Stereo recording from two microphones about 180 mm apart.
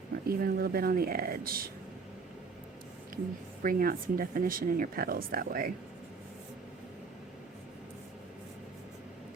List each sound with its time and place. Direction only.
0.3 s speech: 55° right (ahead or behind)
3.6 s speech: 50° right (ahead or behind)